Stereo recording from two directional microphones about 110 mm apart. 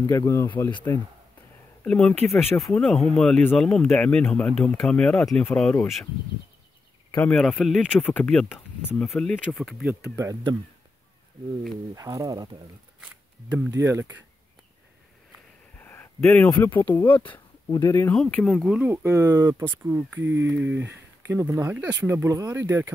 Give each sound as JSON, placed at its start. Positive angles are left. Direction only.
{"t": 0.3, "sound": "speech", "side_deg": 25}
{"t": 1.9, "sound": "speech", "side_deg": 5}
{"t": 7.1, "sound": "a sound", "side_deg": 15}
{"t": 7.3, "sound": "speech", "side_deg": 5}
{"t": 7.8, "sound": "speech", "side_deg": 15}
{"t": 10.5, "sound": "speech", "side_deg": -40}
{"t": 11.9, "sound": "speech", "side_deg": -30}
{"t": 13.0, "sound": "a sound", "side_deg": -10}
{"t": 13.8, "sound": "speech", "side_deg": -25}
{"t": 15.8, "sound": "a sound", "side_deg": 20}
{"t": 16.5, "sound": "speech", "side_deg": 15}
{"t": 17.6, "sound": "speech", "side_deg": 30}
{"t": 18.1, "sound": "speech", "side_deg": 5}
{"t": 18.8, "sound": "speech", "side_deg": -20}